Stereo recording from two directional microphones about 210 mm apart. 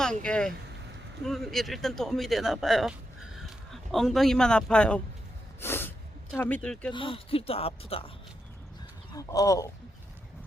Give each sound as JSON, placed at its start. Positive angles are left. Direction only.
{"t": 0.0, "sound": "a man's voice", "side_deg": 5}
{"t": 5.5, "sound": "a sound", "side_deg": 10}
{"t": 6.3, "sound": "speech", "side_deg": 10}
{"t": 6.9, "sound": "speech", "side_deg": 25}
{"t": 9.1, "sound": "speech", "side_deg": 15}